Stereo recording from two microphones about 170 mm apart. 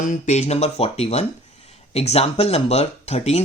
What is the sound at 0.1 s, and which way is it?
Speech, 40° left (ahead or behind).